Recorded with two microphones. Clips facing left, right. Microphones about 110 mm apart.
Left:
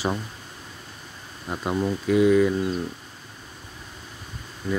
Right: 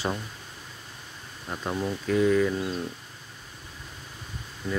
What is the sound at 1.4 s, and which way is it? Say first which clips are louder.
Speech: left 4 dB; 10° left (ahead or behind).